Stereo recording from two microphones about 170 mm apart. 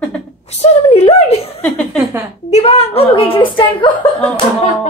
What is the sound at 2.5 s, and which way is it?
A woman's voice, 35° left (ahead or behind).